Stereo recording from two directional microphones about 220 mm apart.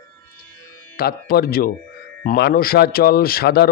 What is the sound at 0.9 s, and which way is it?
A man's voice, 45° left (ahead or behind).